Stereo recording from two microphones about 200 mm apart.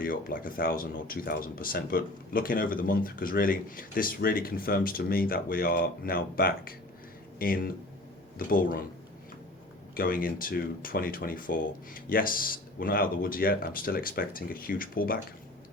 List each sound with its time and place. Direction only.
0.0 s speech: 45° left (ahead or behind)
9.9 s speech: 45° left (ahead or behind)